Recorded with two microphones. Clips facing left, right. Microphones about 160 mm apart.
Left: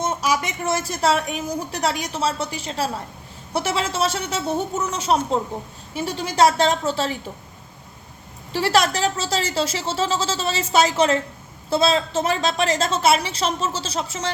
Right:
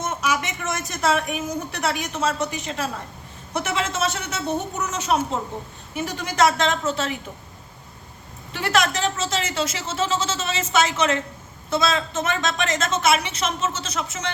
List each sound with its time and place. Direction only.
0.0 s a woman's voice: 35° left (ahead or behind)
8.5 s a woman's voice: 35° left (ahead or behind)